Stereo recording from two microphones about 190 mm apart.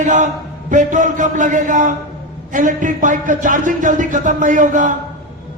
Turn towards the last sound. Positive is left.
turn(degrees=-40)  # may be behind; listen again after turning